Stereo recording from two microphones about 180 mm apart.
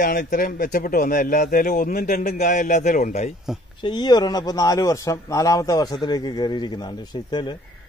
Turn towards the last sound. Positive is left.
turn(degrees=25)  # may be behind; listen again after turning